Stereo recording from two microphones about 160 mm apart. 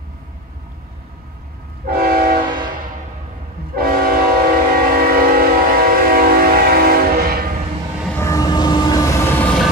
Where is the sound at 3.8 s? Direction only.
65° right (ahead or behind).